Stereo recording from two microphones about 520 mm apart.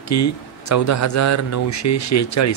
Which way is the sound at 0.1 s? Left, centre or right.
Left.